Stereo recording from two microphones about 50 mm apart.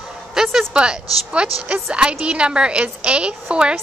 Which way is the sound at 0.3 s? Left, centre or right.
Centre.